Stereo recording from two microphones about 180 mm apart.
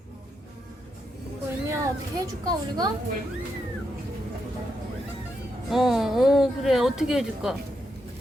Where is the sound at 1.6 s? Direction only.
20° right (ahead or behind).